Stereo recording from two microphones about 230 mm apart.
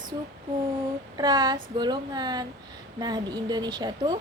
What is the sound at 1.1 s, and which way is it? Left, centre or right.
A woman's voice, centre.